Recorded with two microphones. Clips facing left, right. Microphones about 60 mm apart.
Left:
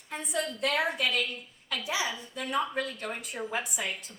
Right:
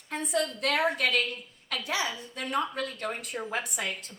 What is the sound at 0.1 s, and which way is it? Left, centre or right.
A woman's voice, right.